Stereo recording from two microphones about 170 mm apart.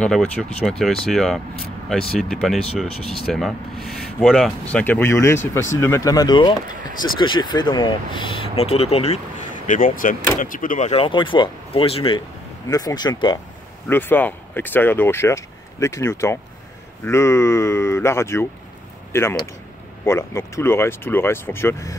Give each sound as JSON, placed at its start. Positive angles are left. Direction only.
{"t": 0.0, "sound": "speech", "side_deg": 5}
{"t": 9.7, "sound": "speech", "side_deg": 55}
{"t": 10.9, "sound": "speech", "side_deg": 30}
{"t": 12.6, "sound": "speech", "side_deg": 20}
{"t": 13.8, "sound": "speech", "side_deg": 10}